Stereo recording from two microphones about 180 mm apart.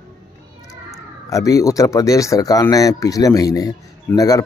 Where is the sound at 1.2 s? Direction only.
20° left (ahead or behind).